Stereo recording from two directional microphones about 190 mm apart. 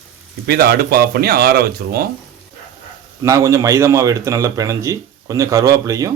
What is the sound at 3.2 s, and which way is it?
A man's voice, 15° right (ahead or behind).